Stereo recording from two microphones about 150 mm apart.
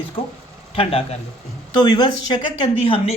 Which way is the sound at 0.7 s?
40° left (ahead or behind).